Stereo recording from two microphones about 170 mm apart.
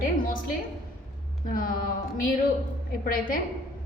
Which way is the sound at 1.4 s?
55° left (ahead or behind).